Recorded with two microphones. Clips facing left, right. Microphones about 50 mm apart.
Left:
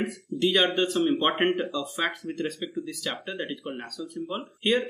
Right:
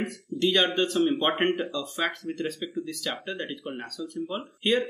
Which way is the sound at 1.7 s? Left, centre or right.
Centre.